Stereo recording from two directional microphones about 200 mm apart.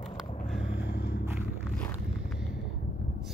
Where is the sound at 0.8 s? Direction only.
50° left (ahead or behind).